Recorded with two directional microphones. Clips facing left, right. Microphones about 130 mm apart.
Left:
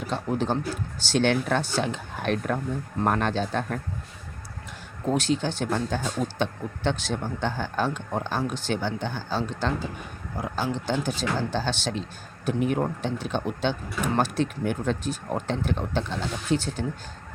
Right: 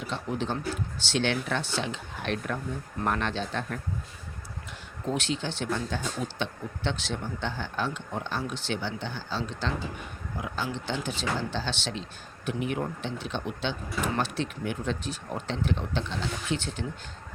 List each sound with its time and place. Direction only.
0.1 s speech: 40° left (ahead or behind)
5.1 s speech: 40° left (ahead or behind)